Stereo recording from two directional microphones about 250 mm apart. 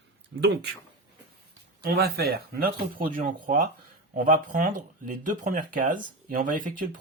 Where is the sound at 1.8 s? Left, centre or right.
Right.